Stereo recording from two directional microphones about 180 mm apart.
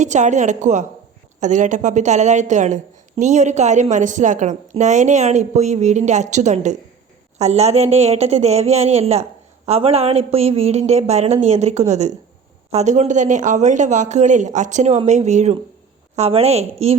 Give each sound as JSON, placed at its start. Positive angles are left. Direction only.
{"t": 0.0, "sound": "a woman's voice", "side_deg": -40}